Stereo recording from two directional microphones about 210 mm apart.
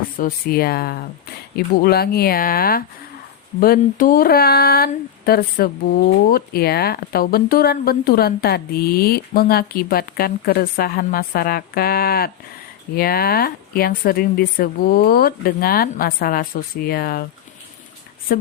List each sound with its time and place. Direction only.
0.2 s speech: 45° left (ahead or behind)
18.3 s speech: 45° left (ahead or behind)